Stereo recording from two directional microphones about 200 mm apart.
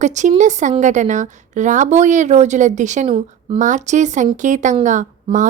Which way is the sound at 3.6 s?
40° right (ahead or behind).